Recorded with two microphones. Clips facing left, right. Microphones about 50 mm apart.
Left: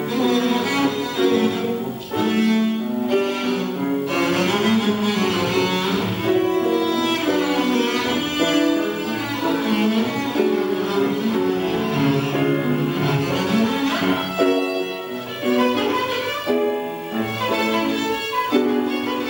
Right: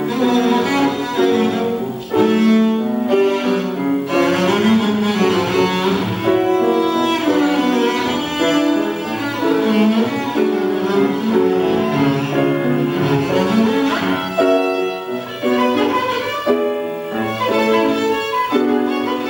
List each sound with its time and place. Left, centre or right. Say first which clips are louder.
0.2 s cello: right 4 dB; centre
0.6 s cello: right 4 dB; right
2.1 s music: right 6 dB; centre
4.1 s cello: right 6 dB; centre
6.6 s music: right 4 dB; centre
9.4 s cello: right 6 dB; centre
11.0 s music: right 6 dB; right
11.4 s music: right 5 dB; centre
15.4 s violin: right 3 dB; centre
17.5 s music: right 7 dB; centre